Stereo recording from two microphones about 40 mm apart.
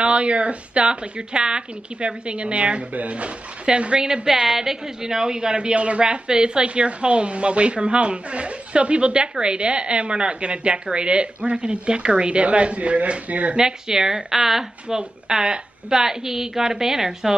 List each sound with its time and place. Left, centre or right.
0.0 s a woman's voice: right
4.3 s a woman's voice: centre; by 13.6 s right
13.6 s a woman's voice: centre